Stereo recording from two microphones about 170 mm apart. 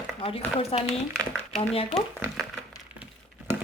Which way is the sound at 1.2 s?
5° left (ahead or behind).